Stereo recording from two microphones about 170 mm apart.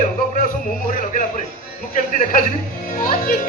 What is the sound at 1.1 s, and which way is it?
A child's voice, 50° left (ahead or behind).